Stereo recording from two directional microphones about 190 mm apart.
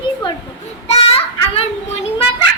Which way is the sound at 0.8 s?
30° left (ahead or behind).